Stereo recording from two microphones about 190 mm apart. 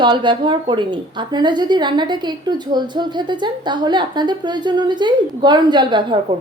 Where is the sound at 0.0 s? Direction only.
25° right (ahead or behind).